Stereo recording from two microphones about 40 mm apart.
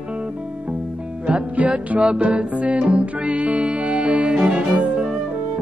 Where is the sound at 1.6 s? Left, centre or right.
Right.